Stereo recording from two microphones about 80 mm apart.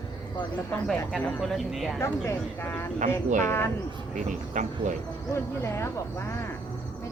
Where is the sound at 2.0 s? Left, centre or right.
Left.